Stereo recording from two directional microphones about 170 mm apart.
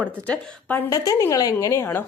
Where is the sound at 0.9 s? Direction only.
20° left (ahead or behind).